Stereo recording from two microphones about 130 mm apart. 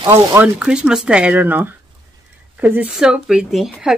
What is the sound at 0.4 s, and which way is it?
A woman's voice, 5° right (ahead or behind).